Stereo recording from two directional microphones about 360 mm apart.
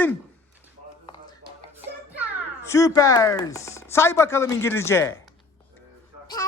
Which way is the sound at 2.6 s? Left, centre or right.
Centre.